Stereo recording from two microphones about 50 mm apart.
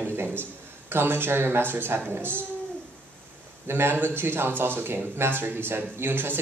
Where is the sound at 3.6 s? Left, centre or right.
Right.